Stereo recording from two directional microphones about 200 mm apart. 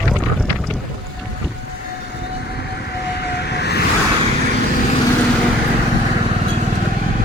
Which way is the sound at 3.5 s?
55° left (ahead or behind).